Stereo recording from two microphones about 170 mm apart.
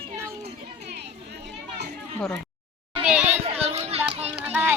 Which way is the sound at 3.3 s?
35° right (ahead or behind).